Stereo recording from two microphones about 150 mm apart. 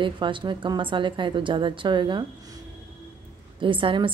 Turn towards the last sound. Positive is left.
turn(degrees=-35)  # may be behind; listen again after turning